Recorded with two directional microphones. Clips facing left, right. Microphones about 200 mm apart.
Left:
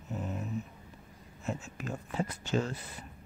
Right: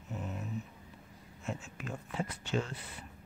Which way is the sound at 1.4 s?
40° left (ahead or behind).